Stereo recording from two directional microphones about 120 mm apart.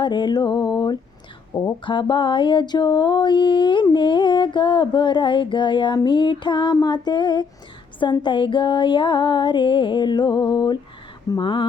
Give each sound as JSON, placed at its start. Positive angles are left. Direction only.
{"t": 0.0, "sound": "mantra", "side_deg": 40}